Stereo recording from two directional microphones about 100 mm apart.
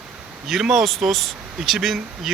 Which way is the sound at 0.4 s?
5° right (ahead or behind).